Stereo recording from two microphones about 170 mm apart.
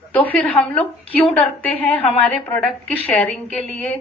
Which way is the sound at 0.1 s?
10° left (ahead or behind).